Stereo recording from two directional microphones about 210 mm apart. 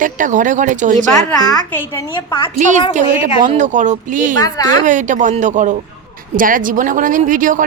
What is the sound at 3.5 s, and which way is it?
A woman's voice, 35° right (ahead or behind).